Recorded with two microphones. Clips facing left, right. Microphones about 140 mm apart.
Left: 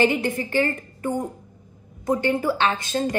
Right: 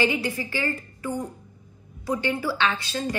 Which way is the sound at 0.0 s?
50° left (ahead or behind).